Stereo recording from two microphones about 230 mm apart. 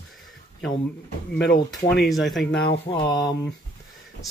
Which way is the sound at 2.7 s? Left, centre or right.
Left.